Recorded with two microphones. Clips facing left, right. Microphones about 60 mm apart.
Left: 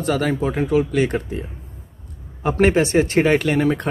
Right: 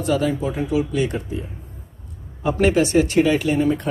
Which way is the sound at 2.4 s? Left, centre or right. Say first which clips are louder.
Left 1 dB; left.